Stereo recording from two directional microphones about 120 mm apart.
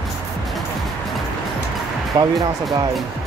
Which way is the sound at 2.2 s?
30° right (ahead or behind).